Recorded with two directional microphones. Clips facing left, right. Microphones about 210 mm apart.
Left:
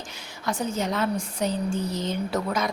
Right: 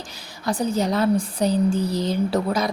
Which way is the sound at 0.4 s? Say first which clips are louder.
Right 5 dB; 35° right (ahead or behind).